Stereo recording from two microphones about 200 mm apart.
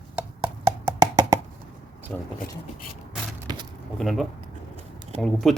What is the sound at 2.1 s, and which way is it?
Speech, 5° left (ahead or behind).